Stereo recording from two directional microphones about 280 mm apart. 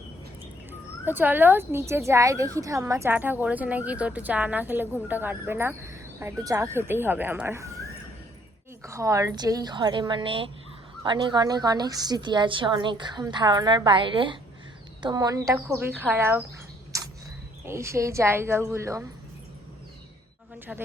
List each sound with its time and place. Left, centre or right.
0.7 s speech: centre
8.8 s speech: centre
17.7 s speech: centre
20.7 s a man's voice: centre